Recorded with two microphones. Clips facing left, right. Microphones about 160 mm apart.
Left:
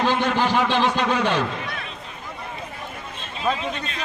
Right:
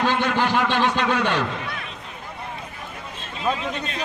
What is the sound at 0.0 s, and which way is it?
A man's voice, 15° left (ahead or behind).